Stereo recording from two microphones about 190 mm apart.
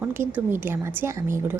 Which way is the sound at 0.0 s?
10° right (ahead or behind).